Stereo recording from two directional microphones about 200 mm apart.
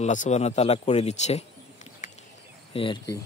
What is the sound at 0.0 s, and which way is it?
Speech, 35° left (ahead or behind).